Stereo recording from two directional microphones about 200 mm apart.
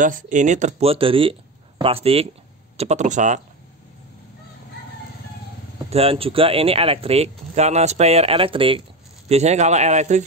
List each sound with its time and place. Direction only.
0.0 s speech: 40° right (ahead or behind)
5.9 s speech: 30° right (ahead or behind)